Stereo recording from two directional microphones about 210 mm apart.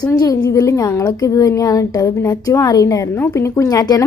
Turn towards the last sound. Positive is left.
turn(degrees=15)  # may be behind; listen again after turning